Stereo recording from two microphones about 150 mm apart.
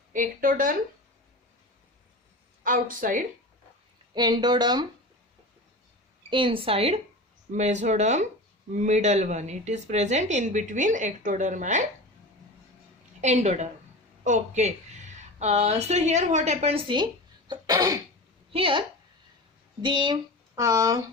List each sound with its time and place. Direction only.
0.1 s speech: 65° right (ahead or behind)
2.6 s speech: 65° right (ahead or behind)
4.1 s speech: 30° right (ahead or behind)
6.3 s a woman's voice: 35° right (ahead or behind); by 11.8 s 55° right (ahead or behind)
13.2 s a woman's voice: 50° right (ahead or behind)
17.5 s cough: 25° right (ahead or behind)
18.5 s a woman's voice: 35° right (ahead or behind)
20.6 s speech: 20° right (ahead or behind)